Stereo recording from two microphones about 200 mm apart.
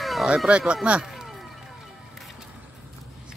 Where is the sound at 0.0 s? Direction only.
Centre (ahead or behind).